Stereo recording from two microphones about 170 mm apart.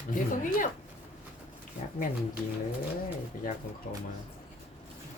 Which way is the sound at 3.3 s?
55° left (ahead or behind).